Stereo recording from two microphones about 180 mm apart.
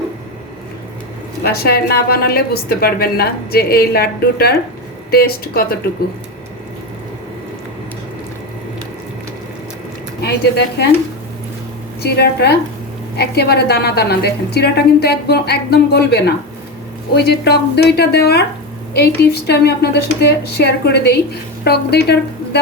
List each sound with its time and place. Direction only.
1.5 s a woman's voice: 60° left (ahead or behind)
10.2 s a woman's voice: 65° left (ahead or behind)
12.0 s a woman's voice: 65° left (ahead or behind)